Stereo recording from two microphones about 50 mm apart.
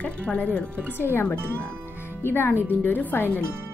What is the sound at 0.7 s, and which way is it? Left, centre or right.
Speech, right.